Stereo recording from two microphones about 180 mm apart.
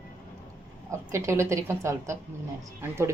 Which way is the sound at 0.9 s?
15° right (ahead or behind).